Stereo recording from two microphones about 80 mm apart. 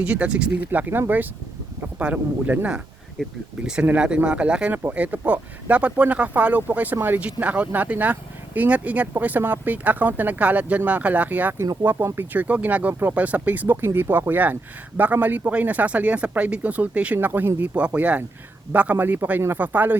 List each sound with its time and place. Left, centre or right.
0.0 s speech: centre
3.2 s speech: centre
3.8 s speech: centre
4.7 s speech: right